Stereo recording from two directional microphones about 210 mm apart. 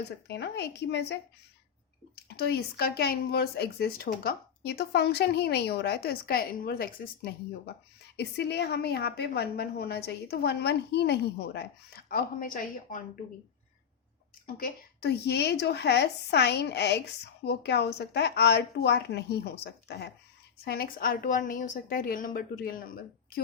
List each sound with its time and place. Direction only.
0.3 s a woman's voice: 55° left (ahead or behind)
2.2 s a woman's voice: 50° left (ahead or behind)
14.4 s a woman's voice: 45° left (ahead or behind)